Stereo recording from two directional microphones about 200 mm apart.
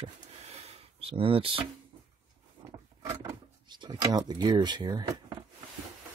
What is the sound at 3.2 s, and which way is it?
Speech, 20° right (ahead or behind).